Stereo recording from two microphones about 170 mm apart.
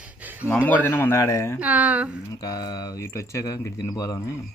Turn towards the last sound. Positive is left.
turn(degrees=20)  # may be behind; listen again after turning